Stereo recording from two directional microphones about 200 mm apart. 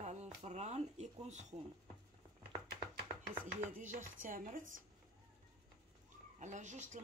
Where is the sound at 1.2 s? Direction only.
35° right (ahead or behind).